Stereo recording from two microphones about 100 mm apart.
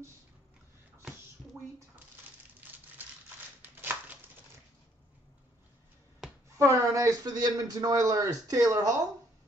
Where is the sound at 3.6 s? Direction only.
20° right (ahead or behind).